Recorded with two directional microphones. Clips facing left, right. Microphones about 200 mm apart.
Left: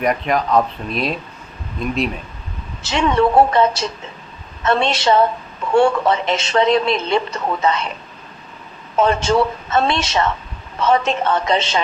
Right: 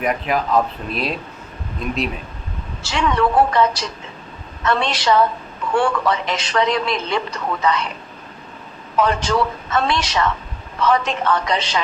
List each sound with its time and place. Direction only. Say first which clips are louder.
0.0 s speech: left 2 dB; 5° right (ahead or behind)
2.8 s speech: left 3 dB; 25° left (ahead or behind)
9.0 s speech: left 3 dB; 25° left (ahead or behind)